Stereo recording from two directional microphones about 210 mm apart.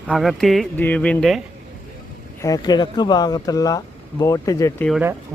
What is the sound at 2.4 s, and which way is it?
Speech, 20° left (ahead or behind).